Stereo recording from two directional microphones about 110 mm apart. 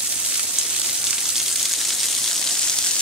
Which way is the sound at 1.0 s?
Centre (ahead or behind).